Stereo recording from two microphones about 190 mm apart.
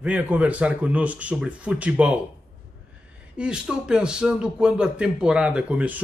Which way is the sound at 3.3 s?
5° right (ahead or behind).